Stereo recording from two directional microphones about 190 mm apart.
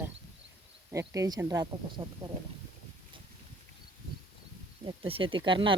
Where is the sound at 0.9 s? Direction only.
15° right (ahead or behind).